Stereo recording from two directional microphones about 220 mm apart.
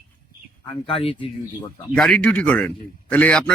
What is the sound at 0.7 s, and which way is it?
Speech, 25° left (ahead or behind).